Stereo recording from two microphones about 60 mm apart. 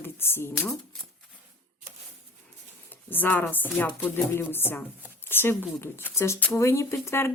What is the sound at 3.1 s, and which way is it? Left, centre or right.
Speech, left.